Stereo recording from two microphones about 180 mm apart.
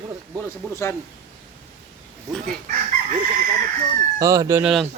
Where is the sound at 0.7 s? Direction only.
15° left (ahead or behind).